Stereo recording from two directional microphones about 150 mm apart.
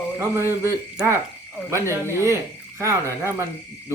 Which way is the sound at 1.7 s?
20° right (ahead or behind).